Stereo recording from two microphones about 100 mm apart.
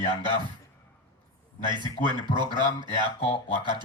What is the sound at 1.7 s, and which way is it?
Speech, 50° right (ahead or behind).